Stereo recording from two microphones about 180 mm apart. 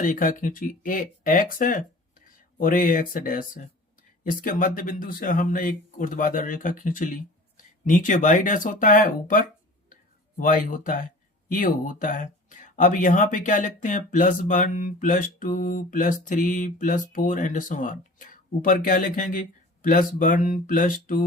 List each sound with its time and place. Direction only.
0.0 s speech: 50° left (ahead or behind)
9.9 s a sound: 50° left (ahead or behind)
11.4 s speech: 50° left (ahead or behind)